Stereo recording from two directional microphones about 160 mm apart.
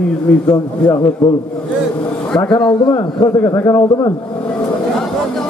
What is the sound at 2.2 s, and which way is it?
A man's voice, 5° left (ahead or behind).